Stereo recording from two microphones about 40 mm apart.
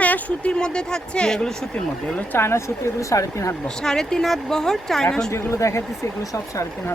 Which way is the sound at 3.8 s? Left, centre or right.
Centre.